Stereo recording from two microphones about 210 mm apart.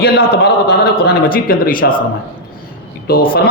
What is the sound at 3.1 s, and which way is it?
Speech, 45° left (ahead or behind).